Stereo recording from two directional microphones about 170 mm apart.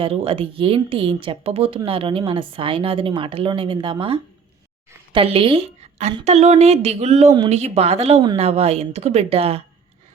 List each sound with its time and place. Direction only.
0.0 s a woman's voice: 35° right (ahead or behind)